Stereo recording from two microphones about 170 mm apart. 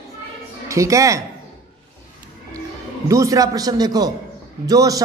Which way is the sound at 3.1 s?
20° right (ahead or behind).